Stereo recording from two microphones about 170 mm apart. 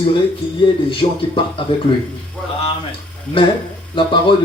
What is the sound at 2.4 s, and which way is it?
Speech, 5° left (ahead or behind).